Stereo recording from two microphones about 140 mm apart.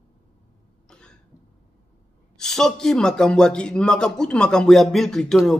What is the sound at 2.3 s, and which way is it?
A man's voice, 5° left (ahead or behind).